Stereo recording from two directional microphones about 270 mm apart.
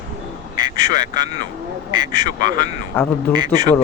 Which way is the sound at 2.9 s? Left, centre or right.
Centre.